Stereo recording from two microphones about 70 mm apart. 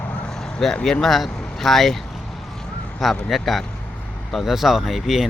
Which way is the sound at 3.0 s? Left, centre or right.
Centre.